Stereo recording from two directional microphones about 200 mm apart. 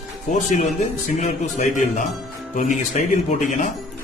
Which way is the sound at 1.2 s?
35° left (ahead or behind).